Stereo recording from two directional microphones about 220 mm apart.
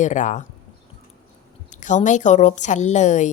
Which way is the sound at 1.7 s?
35° left (ahead or behind).